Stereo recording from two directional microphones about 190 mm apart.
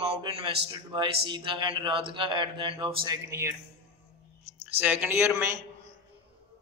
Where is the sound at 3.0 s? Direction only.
20° right (ahead or behind).